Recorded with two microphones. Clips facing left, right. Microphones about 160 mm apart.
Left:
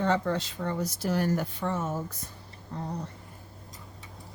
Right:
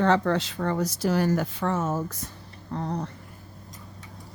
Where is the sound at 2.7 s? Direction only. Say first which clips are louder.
Right 5 dB; 80° right.